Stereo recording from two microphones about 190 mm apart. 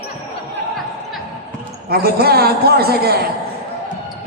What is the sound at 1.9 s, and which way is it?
A man's voice, 55° right (ahead or behind).